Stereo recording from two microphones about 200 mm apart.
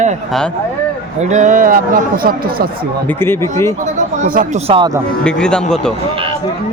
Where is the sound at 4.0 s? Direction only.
40° right (ahead or behind); by 5.0 s 25° right (ahead or behind).